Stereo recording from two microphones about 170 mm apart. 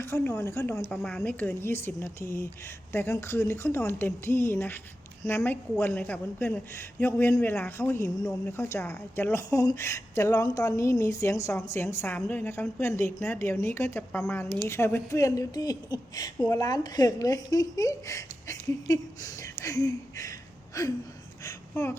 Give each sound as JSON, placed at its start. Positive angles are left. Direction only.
{"t": 0.0, "sound": "speech", "side_deg": 15}
{"t": 5.4, "sound": "a woman's voice", "side_deg": 0}